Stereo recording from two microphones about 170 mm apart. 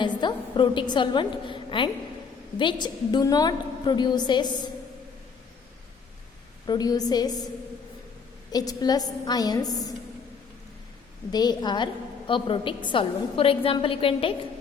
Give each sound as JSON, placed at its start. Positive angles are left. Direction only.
{"t": 0.2, "sound": "a woman's voice", "side_deg": 25}
{"t": 6.7, "sound": "a woman's voice", "side_deg": 25}
{"t": 8.5, "sound": "a woman's voice", "side_deg": 20}
{"t": 11.3, "sound": "a woman's voice", "side_deg": 25}